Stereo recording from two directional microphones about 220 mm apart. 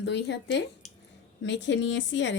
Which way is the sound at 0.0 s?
50° left (ahead or behind).